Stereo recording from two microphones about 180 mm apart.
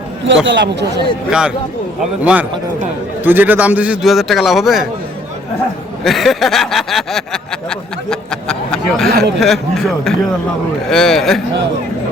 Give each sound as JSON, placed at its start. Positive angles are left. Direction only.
{"t": 0.4, "sound": "speech", "side_deg": -75}
{"t": 1.3, "sound": "a man's voice", "side_deg": -5}
{"t": 6.1, "sound": "a man's voice", "side_deg": 0}